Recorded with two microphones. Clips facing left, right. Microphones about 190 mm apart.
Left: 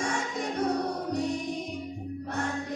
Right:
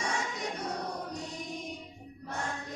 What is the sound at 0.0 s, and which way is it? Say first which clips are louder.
Music: left 4 dB; 55° left (ahead or behind).